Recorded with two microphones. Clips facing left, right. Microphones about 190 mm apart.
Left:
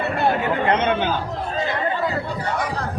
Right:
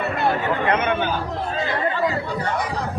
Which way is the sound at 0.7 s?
25° left (ahead or behind).